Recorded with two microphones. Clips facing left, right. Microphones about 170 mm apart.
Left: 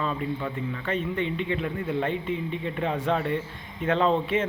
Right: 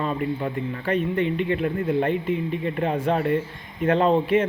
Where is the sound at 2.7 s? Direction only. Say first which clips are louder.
Right 2 dB; 45° right (ahead or behind).